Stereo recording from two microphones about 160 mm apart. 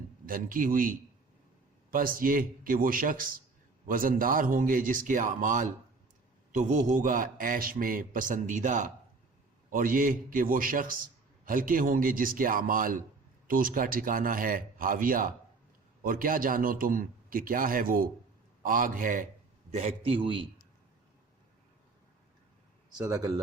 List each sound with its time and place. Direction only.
0.3 s a man's voice: 60° right (ahead or behind)
19.7 s a man's voice: 40° right (ahead or behind)
23.0 s speech: 20° right (ahead or behind)